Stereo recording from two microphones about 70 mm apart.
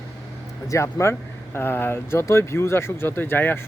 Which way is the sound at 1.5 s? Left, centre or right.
Left.